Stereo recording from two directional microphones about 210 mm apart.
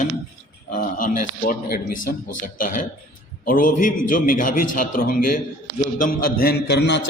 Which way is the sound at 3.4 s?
40° left (ahead or behind).